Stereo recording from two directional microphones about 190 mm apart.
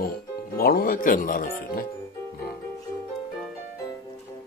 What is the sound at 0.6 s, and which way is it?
Speech, 50° left (ahead or behind).